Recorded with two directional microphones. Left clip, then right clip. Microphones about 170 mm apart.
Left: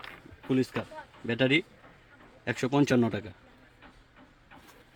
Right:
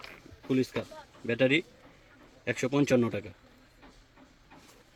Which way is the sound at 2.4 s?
35° left (ahead or behind).